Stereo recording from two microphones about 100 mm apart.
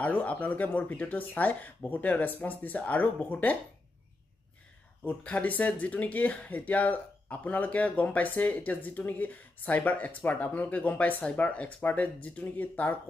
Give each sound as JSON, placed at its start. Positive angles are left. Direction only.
{"t": 0.0, "sound": "speech", "side_deg": 15}
{"t": 5.0, "sound": "speech", "side_deg": 15}